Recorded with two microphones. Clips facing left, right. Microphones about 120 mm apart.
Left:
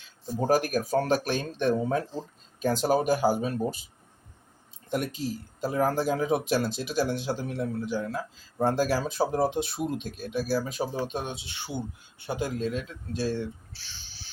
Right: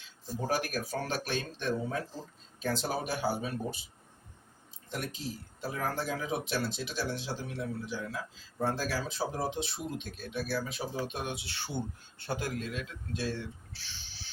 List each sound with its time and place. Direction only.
0.3 s speech: 45° left (ahead or behind)
5.6 s speech: 40° left (ahead or behind); by 12.6 s 20° left (ahead or behind)
12.6 s speech: 35° left (ahead or behind)